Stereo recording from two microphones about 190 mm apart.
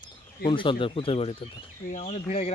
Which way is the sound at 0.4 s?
25° left (ahead or behind).